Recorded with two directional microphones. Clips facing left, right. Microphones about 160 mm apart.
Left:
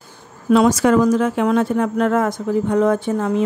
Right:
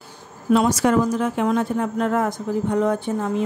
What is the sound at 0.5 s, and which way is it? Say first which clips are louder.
Speech: left 4 dB; 90° left.